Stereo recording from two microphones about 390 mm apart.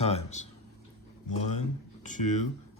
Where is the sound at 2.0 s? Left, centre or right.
Centre.